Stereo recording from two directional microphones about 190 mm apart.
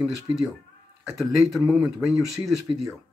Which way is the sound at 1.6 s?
5° right (ahead or behind).